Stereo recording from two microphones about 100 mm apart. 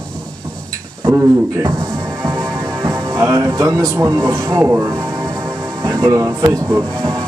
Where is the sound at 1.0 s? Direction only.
35° right (ahead or behind).